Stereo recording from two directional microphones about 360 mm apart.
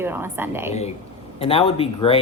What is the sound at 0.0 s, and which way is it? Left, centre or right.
Speech, centre.